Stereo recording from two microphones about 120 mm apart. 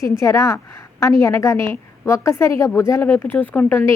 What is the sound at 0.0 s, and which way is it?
A woman's voice, 25° left (ahead or behind).